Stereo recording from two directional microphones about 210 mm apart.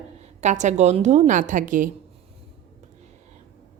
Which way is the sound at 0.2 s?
35° right (ahead or behind).